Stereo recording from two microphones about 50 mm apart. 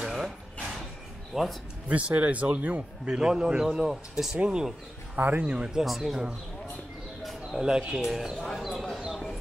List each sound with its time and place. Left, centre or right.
0.0 s drawer open or close: centre
1.3 s speech: centre
1.9 s a man's voice: right
3.2 s speech: centre
5.1 s a man's voice: right
5.4 s a man's voice: centre
5.9 s speech: centre
7.6 s speech: centre
8.9 s a sound: centre